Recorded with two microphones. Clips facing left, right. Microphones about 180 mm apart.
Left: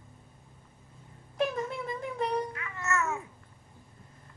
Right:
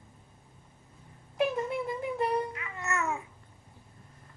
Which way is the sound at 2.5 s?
20° right (ahead or behind).